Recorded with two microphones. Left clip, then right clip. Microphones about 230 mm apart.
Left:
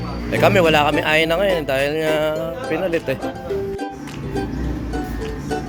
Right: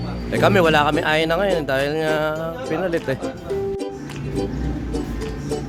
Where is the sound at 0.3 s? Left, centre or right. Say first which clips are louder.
Left 2 dB; centre.